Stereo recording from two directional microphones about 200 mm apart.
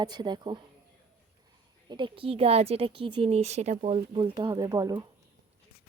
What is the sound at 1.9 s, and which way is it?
A woman's voice, 25° right (ahead or behind).